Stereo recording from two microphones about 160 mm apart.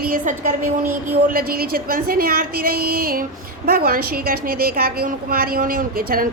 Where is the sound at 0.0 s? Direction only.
60° right (ahead or behind).